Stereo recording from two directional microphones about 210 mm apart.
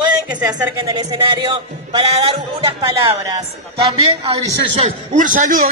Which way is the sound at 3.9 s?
30° right (ahead or behind).